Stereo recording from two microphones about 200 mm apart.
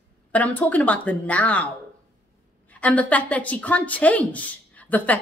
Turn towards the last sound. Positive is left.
turn(degrees=10)  # may be behind; listen again after turning